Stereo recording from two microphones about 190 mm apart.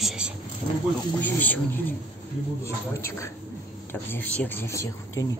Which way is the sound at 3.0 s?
15° left (ahead or behind).